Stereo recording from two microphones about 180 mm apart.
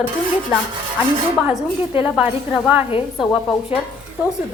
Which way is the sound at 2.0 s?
5° right (ahead or behind).